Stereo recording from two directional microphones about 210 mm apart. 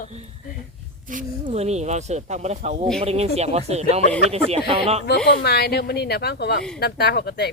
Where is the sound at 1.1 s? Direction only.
40° right (ahead or behind).